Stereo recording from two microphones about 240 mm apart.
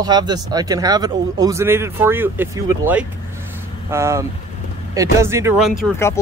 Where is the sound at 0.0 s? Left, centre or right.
Centre.